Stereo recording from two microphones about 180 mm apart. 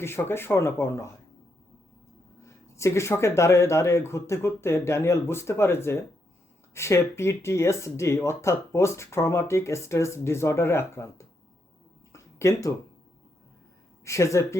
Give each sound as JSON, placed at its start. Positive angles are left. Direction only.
{"t": 0.0, "sound": "speech", "side_deg": 15}
{"t": 2.4, "sound": "speech", "side_deg": 15}
{"t": 12.1, "sound": "a sound", "side_deg": 15}
{"t": 14.0, "sound": "speech", "side_deg": 15}